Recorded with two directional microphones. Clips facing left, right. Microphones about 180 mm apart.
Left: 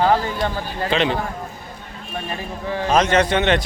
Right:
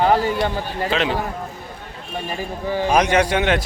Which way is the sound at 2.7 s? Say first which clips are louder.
Even; 10° right (ahead or behind).